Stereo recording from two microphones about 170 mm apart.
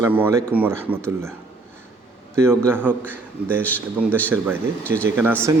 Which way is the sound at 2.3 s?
15° right (ahead or behind).